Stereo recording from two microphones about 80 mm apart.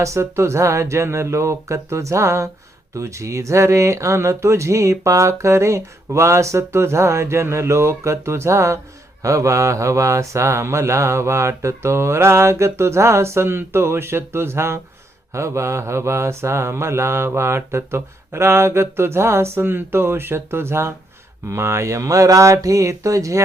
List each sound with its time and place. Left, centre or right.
0.0 s speech: right